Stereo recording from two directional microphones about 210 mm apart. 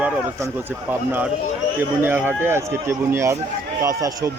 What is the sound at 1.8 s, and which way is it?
Speech, 10° right (ahead or behind).